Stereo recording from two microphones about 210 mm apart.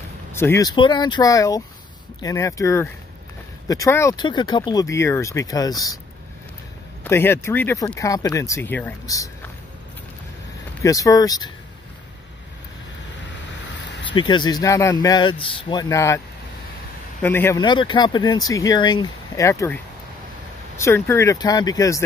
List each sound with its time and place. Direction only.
0.3 s speech: 10° left (ahead or behind)
7.1 s speech: 10° left (ahead or behind)
10.8 s speech: 15° left (ahead or behind)
14.1 s speech: 20° left (ahead or behind)
17.2 s speech: 10° left (ahead or behind)